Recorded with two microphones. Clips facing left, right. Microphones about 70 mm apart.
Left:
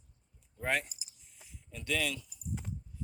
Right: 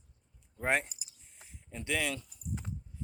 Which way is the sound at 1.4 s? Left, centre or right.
Right.